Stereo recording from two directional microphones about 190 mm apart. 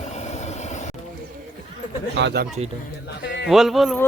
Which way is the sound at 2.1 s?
60° right (ahead or behind).